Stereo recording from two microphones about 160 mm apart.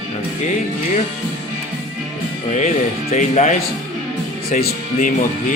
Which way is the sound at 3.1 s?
45° left (ahead or behind).